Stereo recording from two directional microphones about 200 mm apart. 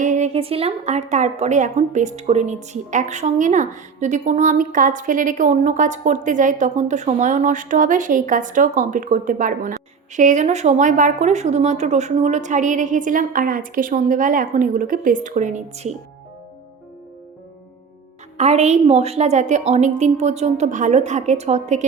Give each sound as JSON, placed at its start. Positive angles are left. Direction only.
{"t": 0.0, "sound": "a woman's voice", "side_deg": -35}
{"t": 18.3, "sound": "a woman's voice", "side_deg": -35}